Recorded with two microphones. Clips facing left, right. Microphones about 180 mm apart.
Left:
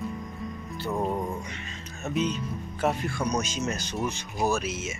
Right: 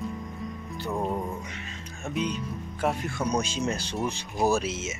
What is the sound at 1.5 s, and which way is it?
Music, 5° right (ahead or behind).